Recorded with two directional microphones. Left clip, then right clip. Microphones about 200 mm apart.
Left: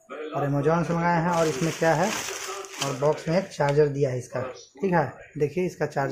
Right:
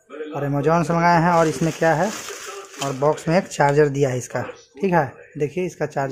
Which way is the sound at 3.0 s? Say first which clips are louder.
Right 5 dB; 25° right (ahead or behind).